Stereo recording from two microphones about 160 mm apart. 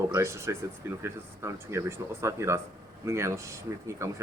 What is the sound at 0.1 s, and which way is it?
Speech, 20° right (ahead or behind).